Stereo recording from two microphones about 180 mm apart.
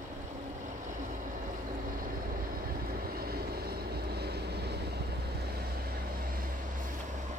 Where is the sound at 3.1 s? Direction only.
55° right (ahead or behind).